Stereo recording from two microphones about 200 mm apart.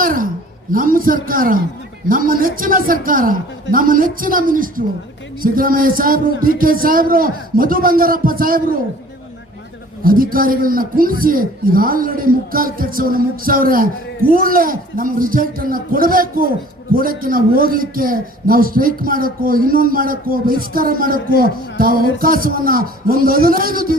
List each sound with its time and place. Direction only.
0.0 s a sound: 45° right (ahead or behind)
0.7 s a man's voice: 45° right (ahead or behind)
10.0 s a man's voice: 45° right (ahead or behind)